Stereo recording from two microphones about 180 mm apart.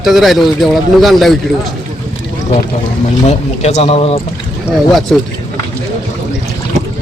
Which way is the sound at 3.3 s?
35° left (ahead or behind).